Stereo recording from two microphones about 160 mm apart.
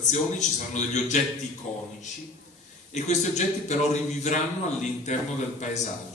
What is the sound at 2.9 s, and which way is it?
A man's voice, 45° left (ahead or behind).